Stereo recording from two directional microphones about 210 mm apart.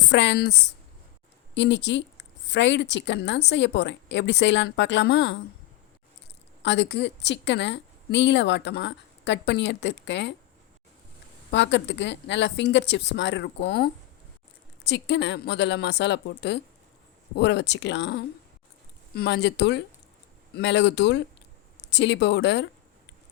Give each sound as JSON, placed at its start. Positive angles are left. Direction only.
{"t": 0.1, "sound": "a woman's voice", "side_deg": 55}
{"t": 6.6, "sound": "a woman's voice", "side_deg": 55}
{"t": 11.5, "sound": "a woman's voice", "side_deg": 55}